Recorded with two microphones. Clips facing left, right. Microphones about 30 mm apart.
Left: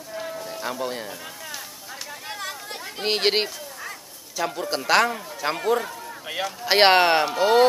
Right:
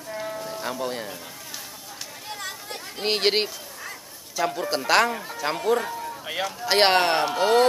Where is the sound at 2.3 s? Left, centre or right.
Centre.